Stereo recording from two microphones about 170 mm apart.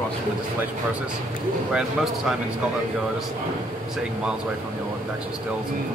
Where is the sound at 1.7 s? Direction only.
Centre (ahead or behind).